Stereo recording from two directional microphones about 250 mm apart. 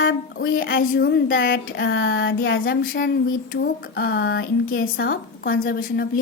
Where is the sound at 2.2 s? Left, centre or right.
Left.